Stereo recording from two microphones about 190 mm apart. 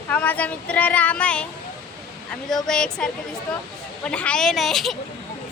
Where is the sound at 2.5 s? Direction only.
5° left (ahead or behind).